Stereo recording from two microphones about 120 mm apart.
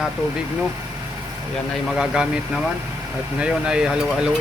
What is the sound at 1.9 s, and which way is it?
Speech, 5° right (ahead or behind).